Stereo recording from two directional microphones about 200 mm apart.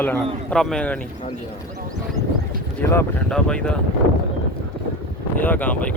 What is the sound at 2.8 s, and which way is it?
Speech, 10° left (ahead or behind).